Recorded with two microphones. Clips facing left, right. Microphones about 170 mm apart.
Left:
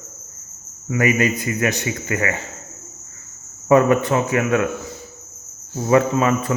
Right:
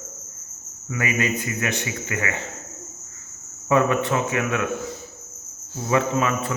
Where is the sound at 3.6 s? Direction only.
40° left (ahead or behind).